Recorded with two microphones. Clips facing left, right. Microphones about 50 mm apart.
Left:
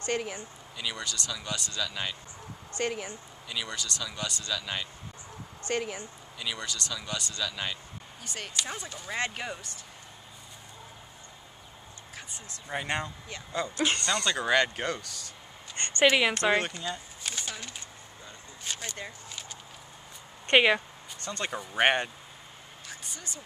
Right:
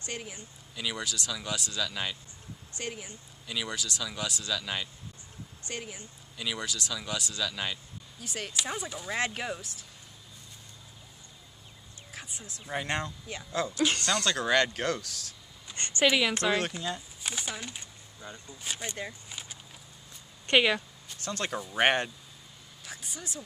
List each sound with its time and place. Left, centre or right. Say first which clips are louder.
0.0 s speech: left 8 dB; left
0.7 s speech: right 1 dB; centre
2.8 s speech: left 7 dB; left
3.4 s speech: right 1 dB; centre
5.7 s speech: left 8 dB; left
6.3 s speech: right 1 dB; centre
12.2 s speech: right 2 dB; centre
15.7 s speech: left 3 dB; left
16.5 s speech: left 1 dB; centre
20.4 s speech: left 2 dB; left
21.1 s speech: right 1 dB; centre
22.8 s a sound: right 1 dB; centre